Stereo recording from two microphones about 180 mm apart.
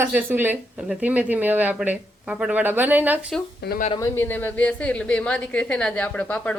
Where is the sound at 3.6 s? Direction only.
65° left (ahead or behind).